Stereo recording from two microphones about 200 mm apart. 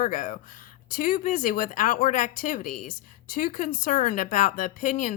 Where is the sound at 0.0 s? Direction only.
40° left (ahead or behind).